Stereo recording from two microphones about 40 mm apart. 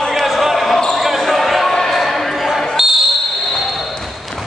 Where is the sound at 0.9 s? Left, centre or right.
Centre.